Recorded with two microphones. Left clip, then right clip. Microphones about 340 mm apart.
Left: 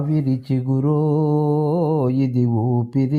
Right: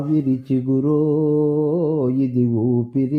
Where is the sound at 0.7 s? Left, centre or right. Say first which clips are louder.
Right 2 dB; centre.